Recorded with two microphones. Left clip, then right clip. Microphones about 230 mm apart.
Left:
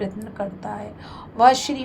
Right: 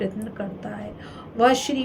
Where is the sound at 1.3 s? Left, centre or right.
Left.